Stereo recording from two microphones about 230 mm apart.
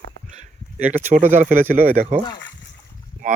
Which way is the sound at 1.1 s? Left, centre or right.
Right.